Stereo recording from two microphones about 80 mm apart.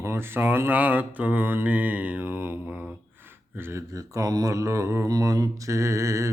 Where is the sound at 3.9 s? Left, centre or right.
Right.